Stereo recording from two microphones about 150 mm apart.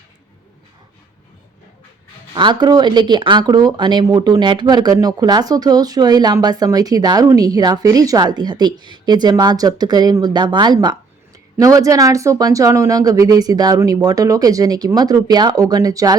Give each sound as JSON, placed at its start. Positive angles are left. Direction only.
{"t": 2.3, "sound": "speech", "side_deg": -30}